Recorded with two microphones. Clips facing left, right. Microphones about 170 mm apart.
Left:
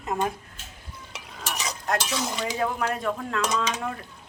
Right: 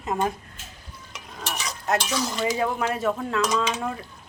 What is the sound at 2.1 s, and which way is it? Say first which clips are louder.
Cutlery: right 2 dB; 20° left (ahead or behind).